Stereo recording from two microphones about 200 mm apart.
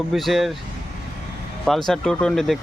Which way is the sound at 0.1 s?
Centre (ahead or behind).